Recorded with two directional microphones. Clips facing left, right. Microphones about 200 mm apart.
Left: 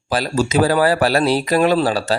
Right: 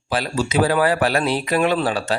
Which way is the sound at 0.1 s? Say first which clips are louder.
Left 3 dB; 40° left (ahead or behind).